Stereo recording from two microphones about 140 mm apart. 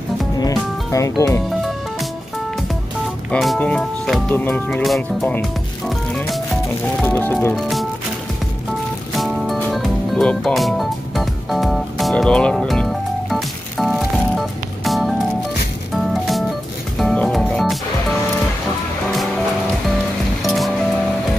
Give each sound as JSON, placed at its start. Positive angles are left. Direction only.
{"t": 0.4, "sound": "music", "side_deg": 25}
{"t": 3.3, "sound": "speech", "side_deg": 5}
{"t": 4.8, "sound": "speech", "side_deg": 0}
{"t": 5.3, "sound": "music", "side_deg": 5}
{"t": 7.5, "sound": "speech", "side_deg": 0}
{"t": 9.1, "sound": "music", "side_deg": 0}
{"t": 20.4, "sound": "music", "side_deg": 0}